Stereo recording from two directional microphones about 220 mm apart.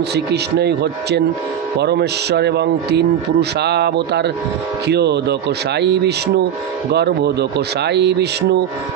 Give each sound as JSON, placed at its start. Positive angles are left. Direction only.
{"t": 0.1, "sound": "a man's voice", "side_deg": -50}